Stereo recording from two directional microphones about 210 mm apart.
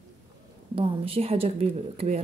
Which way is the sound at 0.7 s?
25° right (ahead or behind).